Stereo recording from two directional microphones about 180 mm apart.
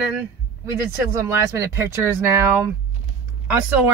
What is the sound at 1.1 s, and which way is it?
Speech, 15° right (ahead or behind).